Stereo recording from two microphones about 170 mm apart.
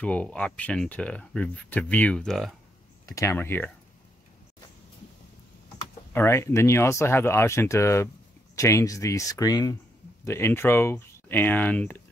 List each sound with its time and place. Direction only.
0.0 s speech: 5° left (ahead or behind)
3.1 s speech: 20° left (ahead or behind)
6.1 s speech: 15° left (ahead or behind)